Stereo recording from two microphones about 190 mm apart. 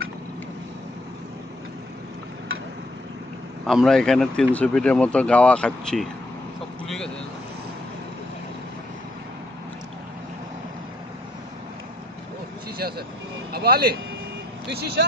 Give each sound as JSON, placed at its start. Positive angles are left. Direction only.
{"t": 3.6, "sound": "speech", "side_deg": 0}
{"t": 12.7, "sound": "vehicle", "side_deg": -55}
{"t": 13.5, "sound": "speech", "side_deg": -55}